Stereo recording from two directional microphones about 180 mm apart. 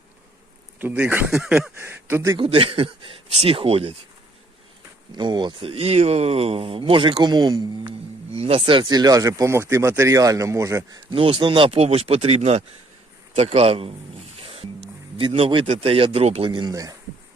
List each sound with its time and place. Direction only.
0.8 s speech: 10° right (ahead or behind)
2.3 s a man's voice: 30° right (ahead or behind)
5.1 s speech: 25° right (ahead or behind)
11.1 s a man's voice: 30° right (ahead or behind)